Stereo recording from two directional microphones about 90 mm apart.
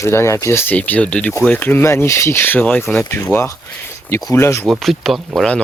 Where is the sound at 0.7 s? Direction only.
15° left (ahead or behind).